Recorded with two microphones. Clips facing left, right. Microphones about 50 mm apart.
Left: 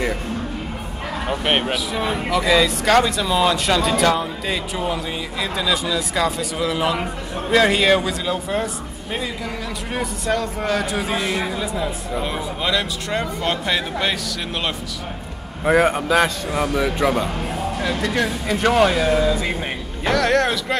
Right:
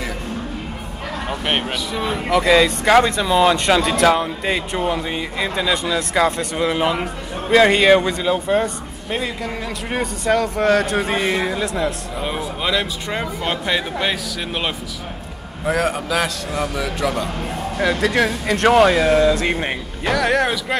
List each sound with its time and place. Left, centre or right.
1.3 s a man's voice: centre
2.3 s a man's voice: centre
4.2 s a man's voice: right
6.9 s a man's voice: centre
10.2 s a man's voice: centre
11.0 s speech: right
11.6 s a man's voice: centre
15.6 s a man's voice: centre